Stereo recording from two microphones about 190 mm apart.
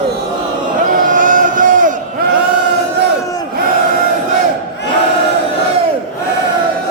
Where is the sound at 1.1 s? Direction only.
45° right (ahead or behind).